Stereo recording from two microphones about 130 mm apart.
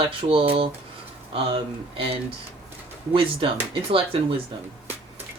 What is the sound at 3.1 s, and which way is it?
Speech, 45° right (ahead or behind).